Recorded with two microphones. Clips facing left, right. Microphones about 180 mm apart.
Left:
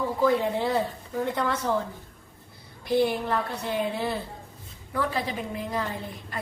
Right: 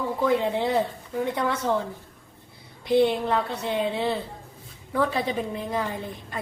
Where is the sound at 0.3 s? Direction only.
20° right (ahead or behind).